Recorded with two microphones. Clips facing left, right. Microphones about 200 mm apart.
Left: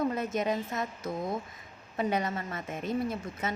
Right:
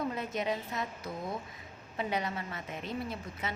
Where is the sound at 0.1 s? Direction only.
45° left (ahead or behind).